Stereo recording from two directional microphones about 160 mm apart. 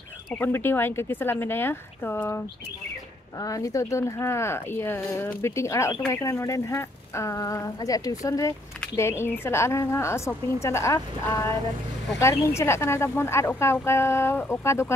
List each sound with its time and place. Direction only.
0.3 s speech: 15° left (ahead or behind)